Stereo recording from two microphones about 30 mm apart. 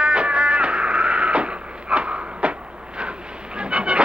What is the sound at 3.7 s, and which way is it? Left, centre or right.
Goose, right.